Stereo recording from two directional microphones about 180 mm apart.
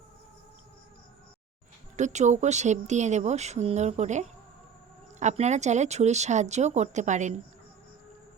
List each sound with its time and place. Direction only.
2.0 s speech: 40° right (ahead or behind)